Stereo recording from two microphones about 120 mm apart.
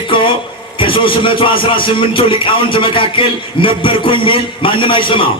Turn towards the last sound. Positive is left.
turn(degrees=45)  # may be behind; listen again after turning